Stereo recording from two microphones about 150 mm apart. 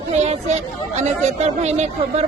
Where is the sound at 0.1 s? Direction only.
50° right (ahead or behind).